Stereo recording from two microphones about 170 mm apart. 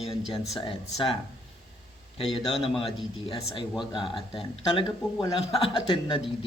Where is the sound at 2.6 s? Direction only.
35° left (ahead or behind).